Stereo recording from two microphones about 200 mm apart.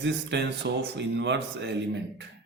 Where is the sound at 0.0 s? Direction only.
60° right (ahead or behind).